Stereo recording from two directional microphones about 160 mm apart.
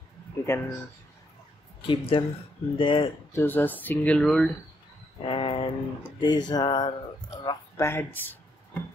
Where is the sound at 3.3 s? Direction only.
15° left (ahead or behind).